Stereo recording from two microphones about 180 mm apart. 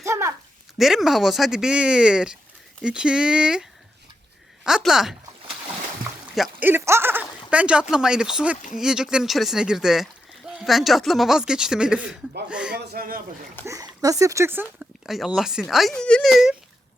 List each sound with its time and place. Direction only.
0.0 s a sound: 15° right (ahead or behind)
0.8 s speech: centre (ahead or behind)
6.3 s speech: 5° right (ahead or behind)
12.7 s speech: 60° right (ahead or behind)
13.7 s speech: 20° right (ahead or behind); by 16.6 s centre (ahead or behind)